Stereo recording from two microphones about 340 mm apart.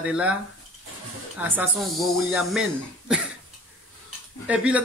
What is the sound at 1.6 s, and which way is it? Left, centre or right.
Music, centre.